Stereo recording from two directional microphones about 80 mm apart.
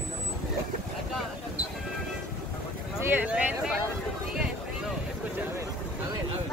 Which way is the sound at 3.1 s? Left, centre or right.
Centre.